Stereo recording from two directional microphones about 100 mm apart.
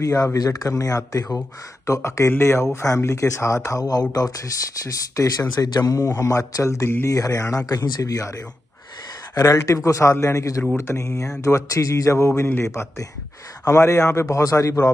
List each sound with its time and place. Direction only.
0.0 s speech: 35° left (ahead or behind)
9.3 s speech: 40° left (ahead or behind)